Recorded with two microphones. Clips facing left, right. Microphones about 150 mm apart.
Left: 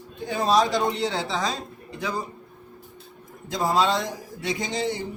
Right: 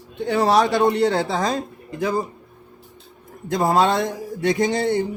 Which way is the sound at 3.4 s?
55° right (ahead or behind).